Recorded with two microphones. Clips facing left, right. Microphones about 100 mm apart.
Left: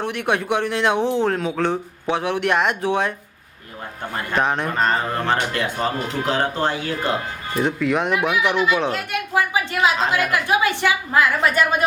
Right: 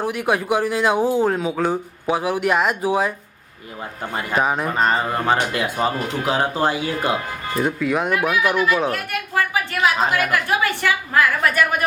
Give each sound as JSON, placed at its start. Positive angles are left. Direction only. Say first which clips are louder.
{"t": 0.0, "sound": "a man's voice", "louder": "right 1 dB", "side_deg": -5}
{"t": 4.1, "sound": "a man's voice", "louder": "right 1 dB", "side_deg": -5}
{"t": 8.9, "sound": "a woman's voice", "louder": "left 1 dB", "side_deg": 20}